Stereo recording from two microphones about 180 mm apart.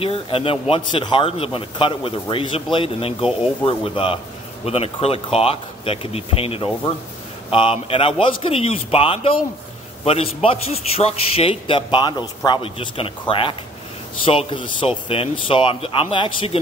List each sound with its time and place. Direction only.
0.0 s a man's voice: 30° left (ahead or behind)